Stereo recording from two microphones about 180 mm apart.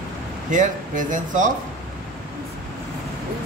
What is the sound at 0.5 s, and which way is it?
Speech, 45° right (ahead or behind).